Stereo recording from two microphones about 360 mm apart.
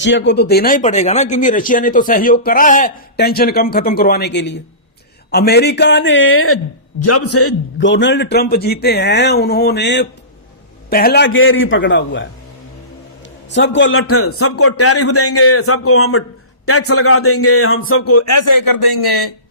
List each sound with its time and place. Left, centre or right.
0.0 s a man's voice: left
13.5 s a man's voice: left